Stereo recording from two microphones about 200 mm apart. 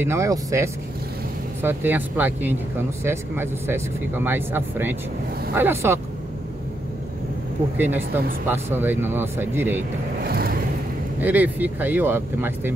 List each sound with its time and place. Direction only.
0.0 s speech: 15° right (ahead or behind)
7.7 s speech: 10° right (ahead or behind)
10.2 s vehicle: 50° right (ahead or behind)
11.1 s speech: 10° right (ahead or behind)